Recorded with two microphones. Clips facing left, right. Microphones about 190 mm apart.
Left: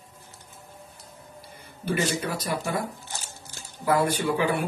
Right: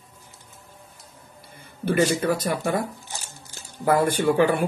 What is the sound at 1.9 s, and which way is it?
Speech, 50° right (ahead or behind).